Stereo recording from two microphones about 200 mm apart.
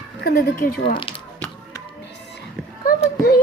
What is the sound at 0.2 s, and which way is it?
Speech, 50° left (ahead or behind).